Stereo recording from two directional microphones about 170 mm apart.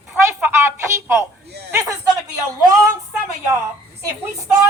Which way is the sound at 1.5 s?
75° right (ahead or behind).